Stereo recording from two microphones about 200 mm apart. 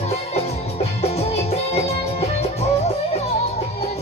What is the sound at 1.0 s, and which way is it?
Music, 30° left (ahead or behind).